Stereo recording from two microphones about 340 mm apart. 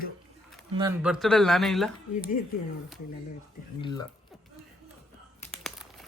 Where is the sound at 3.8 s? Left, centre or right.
Centre.